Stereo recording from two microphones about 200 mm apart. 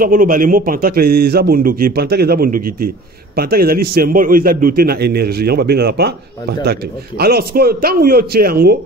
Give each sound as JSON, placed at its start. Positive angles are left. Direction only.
{"t": 0.0, "sound": "a man's voice", "side_deg": -45}